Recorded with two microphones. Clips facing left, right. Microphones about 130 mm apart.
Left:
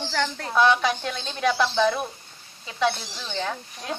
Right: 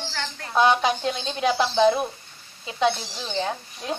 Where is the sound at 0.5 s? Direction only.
35° right (ahead or behind).